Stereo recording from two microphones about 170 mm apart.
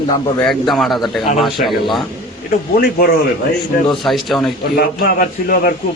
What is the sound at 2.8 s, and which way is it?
Speech, 65° left (ahead or behind).